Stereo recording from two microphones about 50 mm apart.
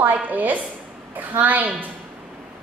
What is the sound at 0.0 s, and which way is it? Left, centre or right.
A woman's voice, right.